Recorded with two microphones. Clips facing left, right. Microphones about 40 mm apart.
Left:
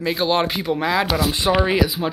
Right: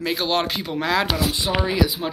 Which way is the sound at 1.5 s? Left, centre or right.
Left.